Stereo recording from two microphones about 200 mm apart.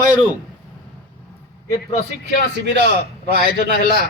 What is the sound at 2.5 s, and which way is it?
A man's voice, 60° right (ahead or behind).